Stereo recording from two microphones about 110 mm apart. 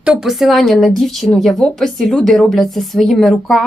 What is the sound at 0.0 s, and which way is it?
Speech, 5° right (ahead or behind).